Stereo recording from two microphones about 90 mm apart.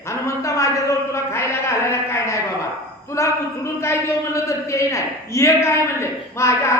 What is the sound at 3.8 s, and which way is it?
A man's voice, 30° left (ahead or behind).